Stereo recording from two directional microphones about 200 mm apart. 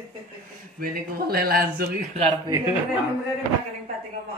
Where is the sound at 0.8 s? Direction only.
50° right (ahead or behind).